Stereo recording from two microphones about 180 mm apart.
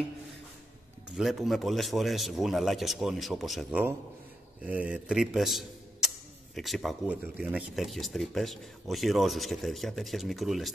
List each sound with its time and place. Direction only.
1.1 s a man's voice: centre (ahead or behind)